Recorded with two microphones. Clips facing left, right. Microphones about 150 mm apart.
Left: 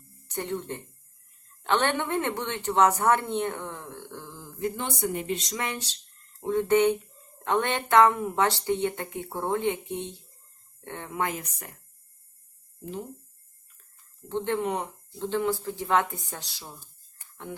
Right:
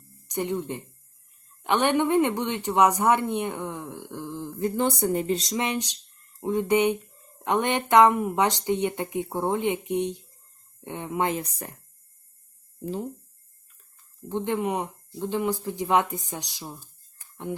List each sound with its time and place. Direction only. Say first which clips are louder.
0.3 s speech: right 4 dB; 15° right (ahead or behind)
4.6 s speech: right 5 dB; 35° right (ahead or behind)
5.5 s speech: right 5 dB; 20° right (ahead or behind)
14.3 s speech: right 1 dB; 15° right (ahead or behind)